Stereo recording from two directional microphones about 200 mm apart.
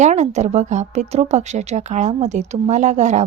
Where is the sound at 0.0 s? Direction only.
35° right (ahead or behind).